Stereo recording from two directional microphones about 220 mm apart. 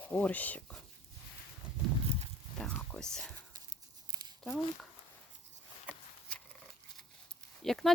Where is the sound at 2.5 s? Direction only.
5° left (ahead or behind).